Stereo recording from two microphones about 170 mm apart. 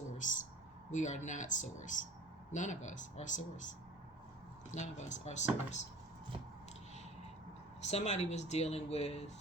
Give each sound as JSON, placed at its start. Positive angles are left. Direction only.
{"t": 0.2, "sound": "a woman's voice", "side_deg": 50}
{"t": 4.7, "sound": "a woman's voice", "side_deg": 45}
{"t": 7.8, "sound": "speech", "side_deg": 40}